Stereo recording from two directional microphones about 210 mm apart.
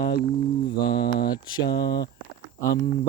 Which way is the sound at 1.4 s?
20° left (ahead or behind).